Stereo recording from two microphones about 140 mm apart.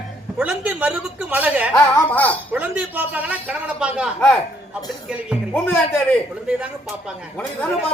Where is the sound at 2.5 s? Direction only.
10° right (ahead or behind).